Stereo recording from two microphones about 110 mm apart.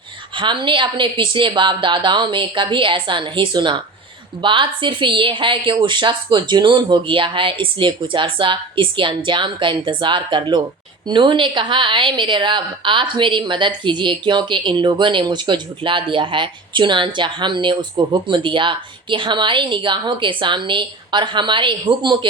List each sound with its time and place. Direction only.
0.3 s a woman's voice: 45° right (ahead or behind)